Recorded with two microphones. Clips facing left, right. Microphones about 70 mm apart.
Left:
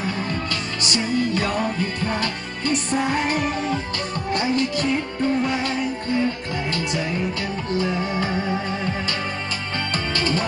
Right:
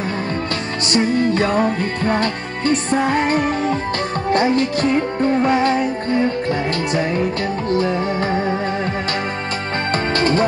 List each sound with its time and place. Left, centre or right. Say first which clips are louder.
0.8 s music: right 6 dB; right
10.1 s music: right 6 dB; right